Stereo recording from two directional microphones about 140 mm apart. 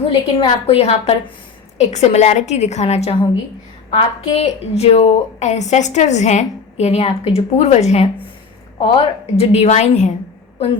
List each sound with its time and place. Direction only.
0.3 s a woman's voice: 45° left (ahead or behind)
8.8 s a woman's voice: 40° left (ahead or behind)